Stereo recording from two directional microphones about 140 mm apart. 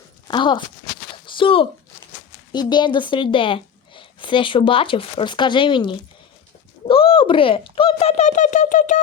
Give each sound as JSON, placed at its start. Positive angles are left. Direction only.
{"t": 0.3, "sound": "speech", "side_deg": 35}
{"t": 1.1, "sound": "a sound", "side_deg": 35}
{"t": 2.5, "sound": "a woman's voice", "side_deg": 30}